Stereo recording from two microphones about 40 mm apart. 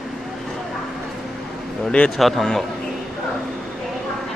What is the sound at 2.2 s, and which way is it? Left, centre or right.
Speech, centre.